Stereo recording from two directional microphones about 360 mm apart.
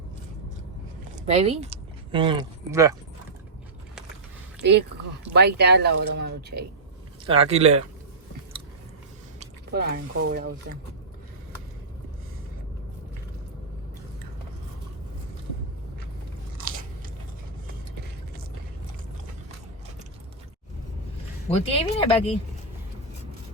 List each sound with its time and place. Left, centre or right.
1.1 s speech: centre
4.6 s speech: right
7.3 s speech: centre
9.4 s speech: right
21.6 s speech: centre